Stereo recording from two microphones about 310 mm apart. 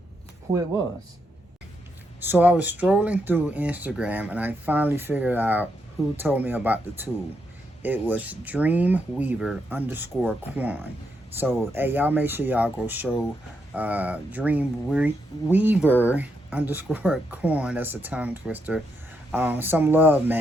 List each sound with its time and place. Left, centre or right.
0.5 s speech: centre
2.2 s speech: centre